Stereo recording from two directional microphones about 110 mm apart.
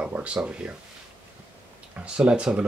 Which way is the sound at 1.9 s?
10° right (ahead or behind).